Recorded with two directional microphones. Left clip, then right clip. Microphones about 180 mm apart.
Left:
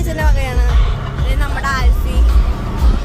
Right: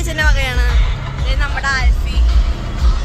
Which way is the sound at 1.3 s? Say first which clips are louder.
Right 2 dB; 20° left (ahead or behind).